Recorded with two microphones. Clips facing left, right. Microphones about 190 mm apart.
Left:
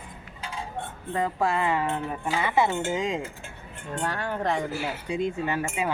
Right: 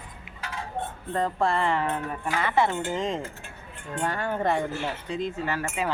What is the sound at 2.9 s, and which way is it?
Speech, centre (ahead or behind).